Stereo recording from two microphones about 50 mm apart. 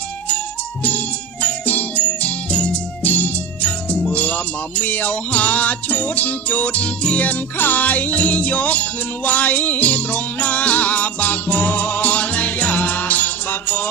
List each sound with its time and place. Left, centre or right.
0.9 s music: left
3.0 s music: left